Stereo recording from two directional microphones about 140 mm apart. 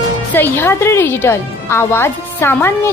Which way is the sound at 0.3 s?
15° left (ahead or behind).